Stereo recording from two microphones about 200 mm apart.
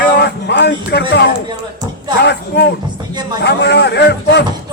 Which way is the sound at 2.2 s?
55° left (ahead or behind).